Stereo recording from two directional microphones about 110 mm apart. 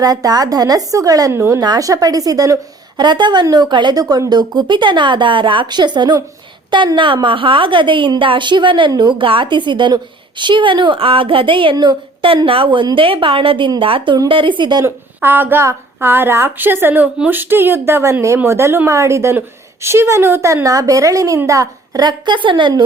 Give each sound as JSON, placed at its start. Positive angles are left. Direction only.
{"t": 0.0, "sound": "a woman's voice", "side_deg": -35}
{"t": 14.8, "sound": "a woman's voice", "side_deg": -20}